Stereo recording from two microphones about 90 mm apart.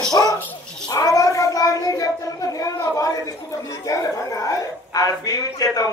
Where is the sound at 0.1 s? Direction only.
45° left (ahead or behind).